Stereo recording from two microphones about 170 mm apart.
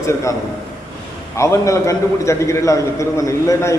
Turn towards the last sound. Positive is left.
turn(degrees=20)  # may be behind; listen again after turning